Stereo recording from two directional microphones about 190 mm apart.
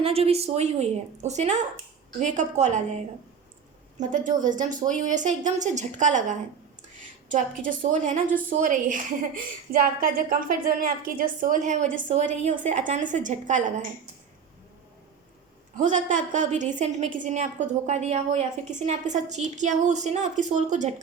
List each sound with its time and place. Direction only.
0.0 s a woman's voice: 30° right (ahead or behind)
15.8 s a woman's voice: 40° right (ahead or behind)